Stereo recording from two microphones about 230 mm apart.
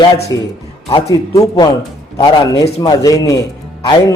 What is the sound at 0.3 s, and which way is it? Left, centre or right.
Speech, centre.